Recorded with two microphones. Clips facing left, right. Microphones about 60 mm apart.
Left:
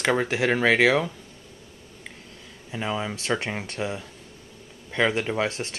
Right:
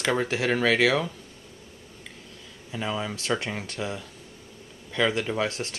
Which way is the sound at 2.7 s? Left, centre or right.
Centre.